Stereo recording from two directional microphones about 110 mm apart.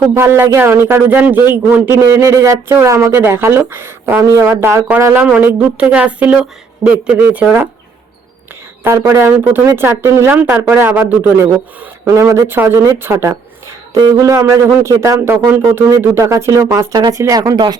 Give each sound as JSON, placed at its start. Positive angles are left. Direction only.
{"t": 0.1, "sound": "a man's voice", "side_deg": -20}
{"t": 5.2, "sound": "speech", "side_deg": -10}
{"t": 8.8, "sound": "a man's voice", "side_deg": -20}
{"t": 12.0, "sound": "a man's voice", "side_deg": -25}